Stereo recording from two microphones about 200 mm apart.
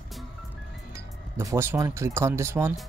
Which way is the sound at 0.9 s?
15° right (ahead or behind).